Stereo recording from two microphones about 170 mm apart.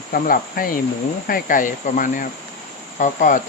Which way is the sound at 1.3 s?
50° left (ahead or behind).